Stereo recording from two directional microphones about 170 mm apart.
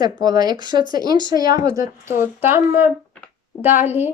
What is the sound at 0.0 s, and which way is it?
Speech, 25° right (ahead or behind).